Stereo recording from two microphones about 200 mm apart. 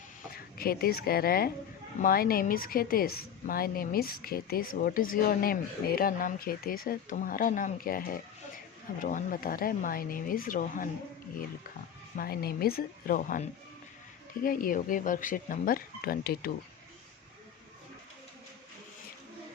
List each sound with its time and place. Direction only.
0.3 s a woman's voice: 50° left (ahead or behind)
12.1 s a woman's voice: 50° left (ahead or behind)